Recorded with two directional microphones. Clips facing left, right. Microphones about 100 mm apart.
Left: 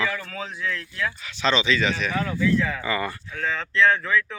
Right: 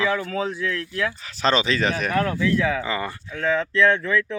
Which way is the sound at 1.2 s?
40° right (ahead or behind).